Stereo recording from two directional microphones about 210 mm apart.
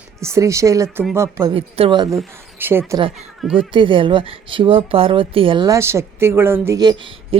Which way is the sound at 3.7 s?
25° right (ahead or behind).